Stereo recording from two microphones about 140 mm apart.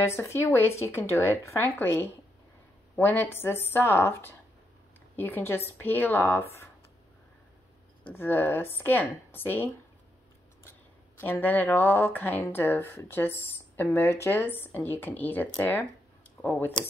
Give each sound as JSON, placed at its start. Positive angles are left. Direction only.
{"t": 0.0, "sound": "speech", "side_deg": 20}
{"t": 8.1, "sound": "speech", "side_deg": 15}
{"t": 11.1, "sound": "speech", "side_deg": 15}